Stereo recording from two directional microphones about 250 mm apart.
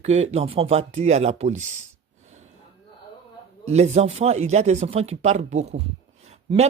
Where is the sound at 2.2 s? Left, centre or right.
Right.